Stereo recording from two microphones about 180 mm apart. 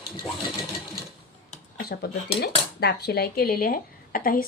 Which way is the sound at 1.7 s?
60° left (ahead or behind).